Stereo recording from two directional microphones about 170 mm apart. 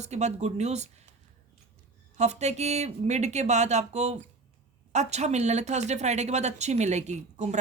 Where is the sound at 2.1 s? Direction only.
40° right (ahead or behind).